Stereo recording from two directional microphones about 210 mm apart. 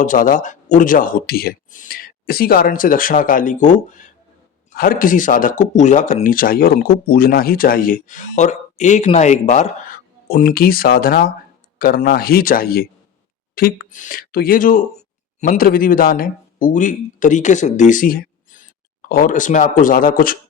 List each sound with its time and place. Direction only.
0.0 s speech: 40° left (ahead or behind)